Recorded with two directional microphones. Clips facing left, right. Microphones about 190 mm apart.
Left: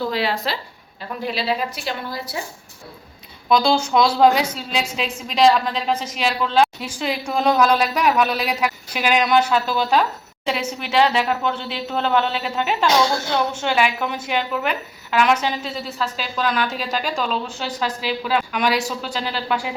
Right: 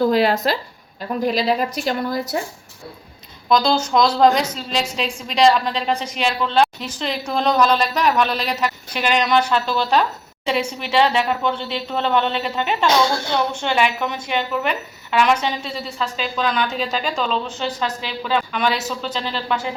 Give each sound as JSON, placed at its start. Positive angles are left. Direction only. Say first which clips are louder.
{"t": 0.0, "sound": "a woman's voice", "louder": "right 6 dB", "side_deg": -45}
{"t": 3.5, "sound": "a woman's voice", "louder": "even", "side_deg": 10}